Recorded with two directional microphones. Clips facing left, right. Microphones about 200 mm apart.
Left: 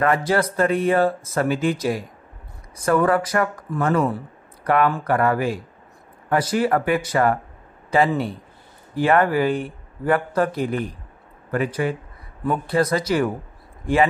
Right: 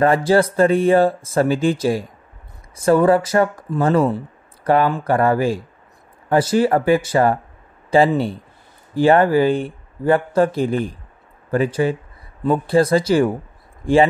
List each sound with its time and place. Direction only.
0.0 s speech: 30° right (ahead or behind)